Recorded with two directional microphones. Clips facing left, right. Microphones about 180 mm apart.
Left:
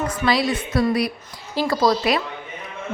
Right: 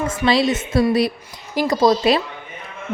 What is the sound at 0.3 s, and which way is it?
A woman's voice, 25° right (ahead or behind).